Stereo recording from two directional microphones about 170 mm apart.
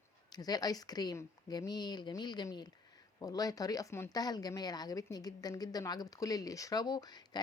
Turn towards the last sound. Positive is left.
turn(degrees=25)  # may be behind; listen again after turning